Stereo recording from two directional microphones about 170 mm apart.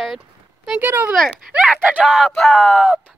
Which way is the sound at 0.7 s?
10° right (ahead or behind).